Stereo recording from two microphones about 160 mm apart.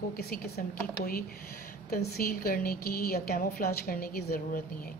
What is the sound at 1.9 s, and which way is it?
Speech, 65° left (ahead or behind).